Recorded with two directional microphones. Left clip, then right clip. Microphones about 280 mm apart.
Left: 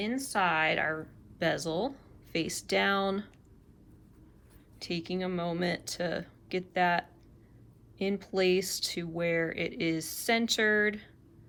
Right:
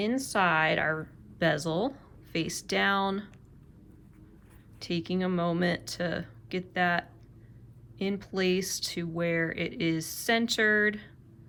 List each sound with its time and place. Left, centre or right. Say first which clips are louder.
0.0 s speech: right 3 dB; centre
4.8 s speech: right 3 dB; centre